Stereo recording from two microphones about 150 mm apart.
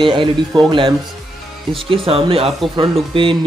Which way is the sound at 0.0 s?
35° right (ahead or behind).